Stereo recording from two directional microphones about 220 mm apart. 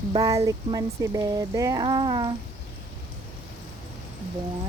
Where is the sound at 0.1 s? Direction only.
15° right (ahead or behind).